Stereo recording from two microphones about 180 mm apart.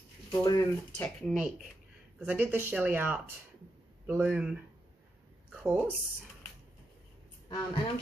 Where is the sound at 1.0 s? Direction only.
Centre (ahead or behind).